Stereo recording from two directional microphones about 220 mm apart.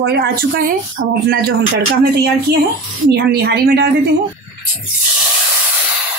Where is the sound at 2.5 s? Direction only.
45° right (ahead or behind).